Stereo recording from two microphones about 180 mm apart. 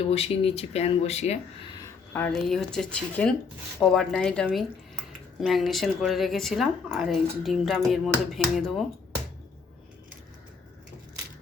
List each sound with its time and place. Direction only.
0.0 s speech: 35° left (ahead or behind)
2.1 s speech: 10° left (ahead or behind)